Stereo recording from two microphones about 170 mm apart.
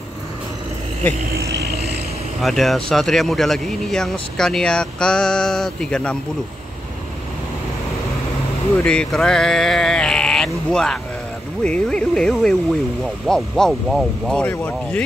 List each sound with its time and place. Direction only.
1.5 s vehicle: 65° right (ahead or behind)
2.4 s speech: centre (ahead or behind)
8.7 s speech: 5° left (ahead or behind)